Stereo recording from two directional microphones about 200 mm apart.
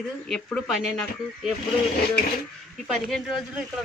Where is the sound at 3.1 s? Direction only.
Centre (ahead or behind).